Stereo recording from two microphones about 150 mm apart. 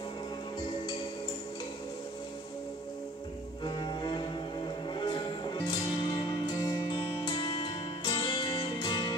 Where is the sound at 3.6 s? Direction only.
30° left (ahead or behind).